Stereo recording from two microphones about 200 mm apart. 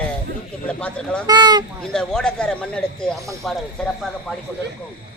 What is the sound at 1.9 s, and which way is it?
A man's voice, 5° left (ahead or behind).